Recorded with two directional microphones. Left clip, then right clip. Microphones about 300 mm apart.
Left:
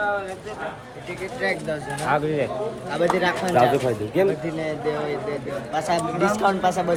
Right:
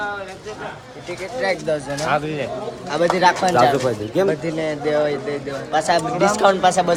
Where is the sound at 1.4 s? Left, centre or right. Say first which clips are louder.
Right 5 dB; right.